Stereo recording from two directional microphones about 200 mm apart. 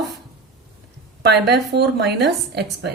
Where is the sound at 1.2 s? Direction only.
55° right (ahead or behind).